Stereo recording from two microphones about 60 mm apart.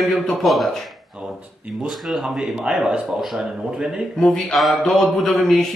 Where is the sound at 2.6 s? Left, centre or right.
Centre.